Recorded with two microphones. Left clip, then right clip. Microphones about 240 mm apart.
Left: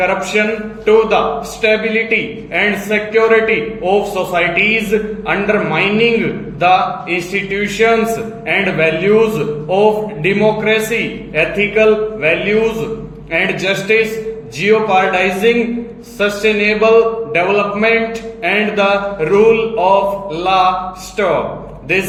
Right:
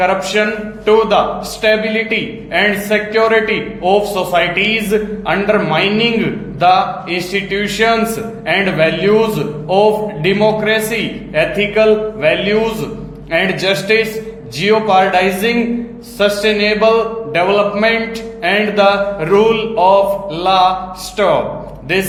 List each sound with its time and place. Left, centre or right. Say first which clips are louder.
0.4 s a man's voice: even; right